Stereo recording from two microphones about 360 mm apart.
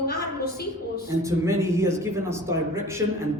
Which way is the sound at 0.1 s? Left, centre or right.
Left.